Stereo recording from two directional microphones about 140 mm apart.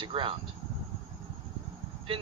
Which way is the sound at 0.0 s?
40° right (ahead or behind).